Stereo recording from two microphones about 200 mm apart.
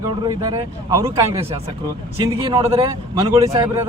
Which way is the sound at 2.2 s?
25° right (ahead or behind).